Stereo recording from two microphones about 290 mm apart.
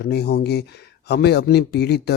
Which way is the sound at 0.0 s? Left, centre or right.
Left.